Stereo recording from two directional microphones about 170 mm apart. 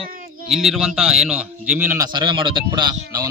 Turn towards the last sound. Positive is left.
turn(degrees=-25)  # may be behind; listen again after turning